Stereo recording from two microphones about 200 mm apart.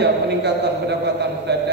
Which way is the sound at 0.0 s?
55° right (ahead or behind).